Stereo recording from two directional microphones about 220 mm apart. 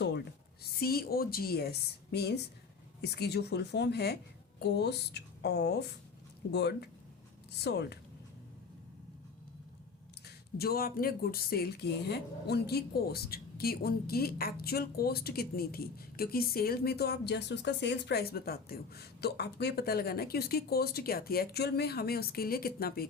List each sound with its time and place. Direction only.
0.6 s speech: 45° left (ahead or behind)
10.2 s speech: 45° left (ahead or behind)